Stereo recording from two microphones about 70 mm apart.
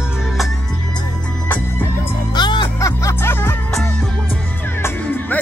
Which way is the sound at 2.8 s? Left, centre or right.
Left.